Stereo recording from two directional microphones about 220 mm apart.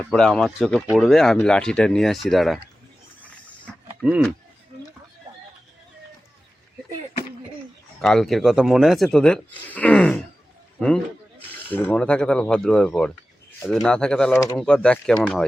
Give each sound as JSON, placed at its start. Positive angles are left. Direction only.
{"t": 0.1, "sound": "speech", "side_deg": 0}
{"t": 3.7, "sound": "a sound", "side_deg": 5}
{"t": 8.0, "sound": "a man's voice", "side_deg": 0}